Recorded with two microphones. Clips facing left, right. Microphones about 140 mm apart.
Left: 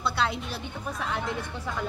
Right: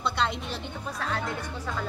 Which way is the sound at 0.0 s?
5° left (ahead or behind).